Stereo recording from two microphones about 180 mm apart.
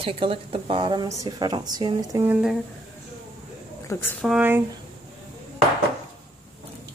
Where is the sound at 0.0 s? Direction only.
30° right (ahead or behind); by 2.6 s 5° right (ahead or behind).